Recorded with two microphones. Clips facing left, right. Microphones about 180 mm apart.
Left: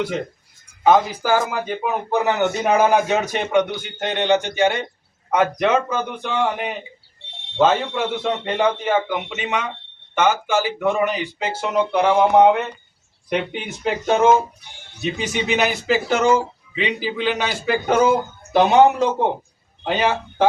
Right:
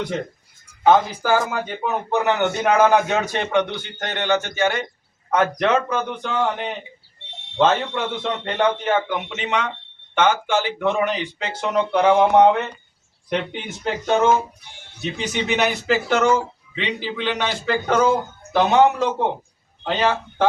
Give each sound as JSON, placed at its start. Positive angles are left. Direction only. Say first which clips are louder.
{"t": 0.9, "sound": "speech", "louder": "even", "side_deg": 10}